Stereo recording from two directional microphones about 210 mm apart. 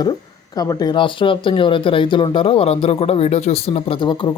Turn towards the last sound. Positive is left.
turn(degrees=20)  # may be behind; listen again after turning